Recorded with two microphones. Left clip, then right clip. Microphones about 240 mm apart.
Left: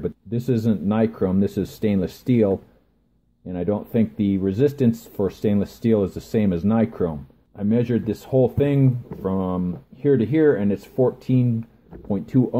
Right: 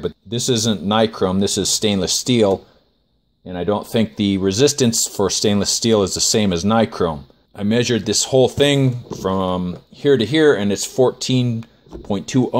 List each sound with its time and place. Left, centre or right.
0.0 s speech: centre